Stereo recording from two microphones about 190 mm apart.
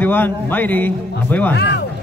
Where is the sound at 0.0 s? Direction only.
10° left (ahead or behind).